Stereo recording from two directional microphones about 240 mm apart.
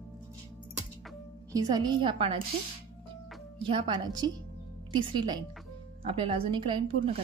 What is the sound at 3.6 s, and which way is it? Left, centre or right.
Speech, centre.